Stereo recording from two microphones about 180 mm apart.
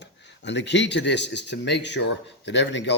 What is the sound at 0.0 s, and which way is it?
Speech, 75° left (ahead or behind).